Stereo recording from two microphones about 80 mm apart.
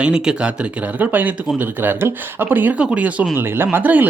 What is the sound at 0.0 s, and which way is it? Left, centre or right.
Speech, centre.